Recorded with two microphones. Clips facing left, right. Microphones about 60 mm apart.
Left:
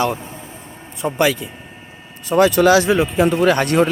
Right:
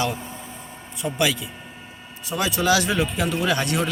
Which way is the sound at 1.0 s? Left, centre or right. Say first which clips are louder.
Left 6 dB; left.